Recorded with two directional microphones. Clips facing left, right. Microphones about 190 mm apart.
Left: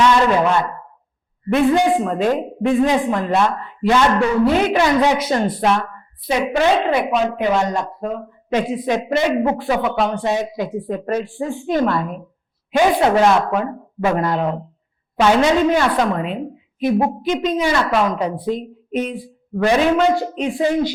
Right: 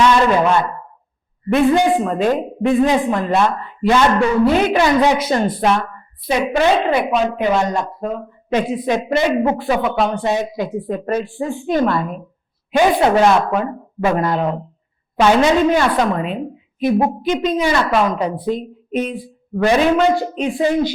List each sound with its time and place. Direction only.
0.0 s a man's voice: 15° right (ahead or behind)
19.6 s a woman's voice: 15° right (ahead or behind)